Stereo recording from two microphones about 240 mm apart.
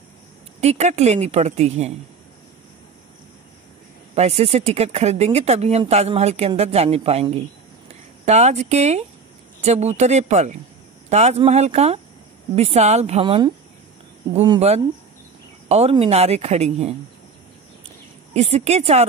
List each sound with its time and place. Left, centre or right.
0.6 s speech: right
4.1 s speech: right
18.3 s speech: right